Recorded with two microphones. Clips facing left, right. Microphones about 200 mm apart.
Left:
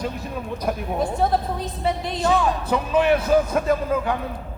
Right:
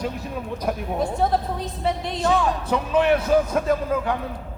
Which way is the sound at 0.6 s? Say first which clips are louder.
Left 1 dB; centre (ahead or behind).